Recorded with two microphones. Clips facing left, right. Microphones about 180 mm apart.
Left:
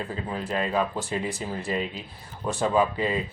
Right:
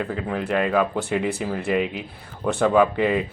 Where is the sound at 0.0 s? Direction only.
60° right (ahead or behind).